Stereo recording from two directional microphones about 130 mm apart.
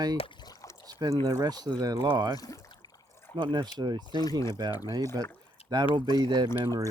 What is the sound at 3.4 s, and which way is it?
Speech, 40° right (ahead or behind).